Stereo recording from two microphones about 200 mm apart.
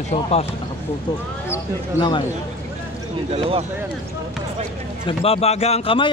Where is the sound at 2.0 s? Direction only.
25° left (ahead or behind).